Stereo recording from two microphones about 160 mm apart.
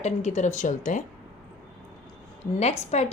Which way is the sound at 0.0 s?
45° left (ahead or behind).